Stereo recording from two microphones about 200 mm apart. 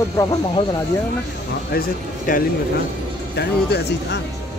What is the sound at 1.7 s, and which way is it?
Speech, 45° left (ahead or behind).